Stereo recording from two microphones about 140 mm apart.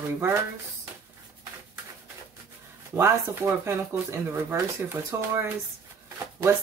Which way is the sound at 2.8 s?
20° right (ahead or behind).